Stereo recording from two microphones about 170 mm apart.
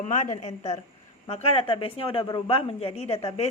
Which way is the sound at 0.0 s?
45° left (ahead or behind).